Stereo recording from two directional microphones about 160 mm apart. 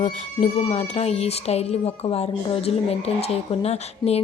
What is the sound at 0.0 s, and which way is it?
A woman's voice, 45° left (ahead or behind).